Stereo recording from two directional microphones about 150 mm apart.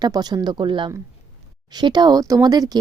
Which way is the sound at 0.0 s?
25° right (ahead or behind).